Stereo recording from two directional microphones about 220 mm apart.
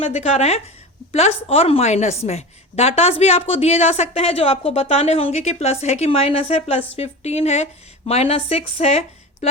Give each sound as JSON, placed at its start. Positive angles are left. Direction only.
{"t": 0.0, "sound": "a woman's voice", "side_deg": 30}